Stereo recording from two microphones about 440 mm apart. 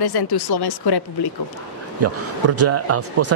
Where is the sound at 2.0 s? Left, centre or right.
Right.